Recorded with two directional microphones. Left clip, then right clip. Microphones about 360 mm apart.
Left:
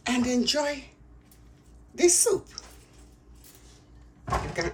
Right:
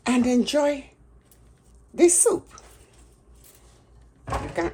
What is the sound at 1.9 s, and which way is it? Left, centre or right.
Speech, centre.